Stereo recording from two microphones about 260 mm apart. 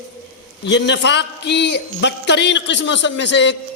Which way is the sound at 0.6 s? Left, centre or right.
Left.